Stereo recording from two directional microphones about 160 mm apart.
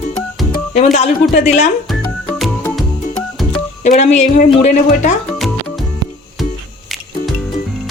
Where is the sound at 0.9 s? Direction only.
45° left (ahead or behind).